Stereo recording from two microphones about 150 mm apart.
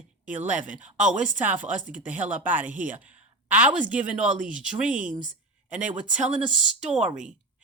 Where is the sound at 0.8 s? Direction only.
55° right (ahead or behind).